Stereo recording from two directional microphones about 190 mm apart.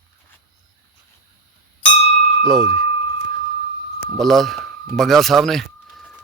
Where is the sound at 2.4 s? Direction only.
Centre (ahead or behind).